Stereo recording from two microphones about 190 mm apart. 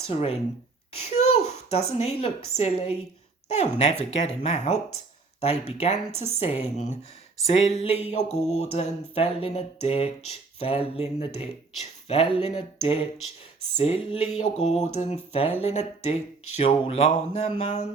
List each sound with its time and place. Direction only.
0.1 s speech: 35° left (ahead or behind)
0.9 s a sound: 35° left (ahead or behind)
2.6 s speech: 35° left (ahead or behind)